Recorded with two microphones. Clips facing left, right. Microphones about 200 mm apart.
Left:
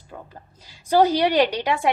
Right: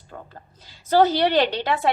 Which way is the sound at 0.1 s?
10° left (ahead or behind).